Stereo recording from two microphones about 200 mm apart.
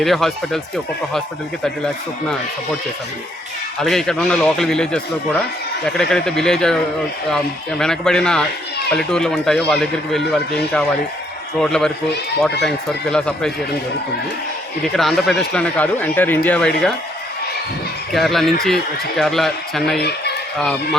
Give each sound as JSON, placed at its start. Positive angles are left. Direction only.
{"t": 0.0, "sound": "speech", "side_deg": 0}
{"t": 3.8, "sound": "speech", "side_deg": 0}
{"t": 7.8, "sound": "speech", "side_deg": 5}
{"t": 14.9, "sound": "speech", "side_deg": 0}
{"t": 18.1, "sound": "speech", "side_deg": 0}
{"t": 20.0, "sound": "speech", "side_deg": 55}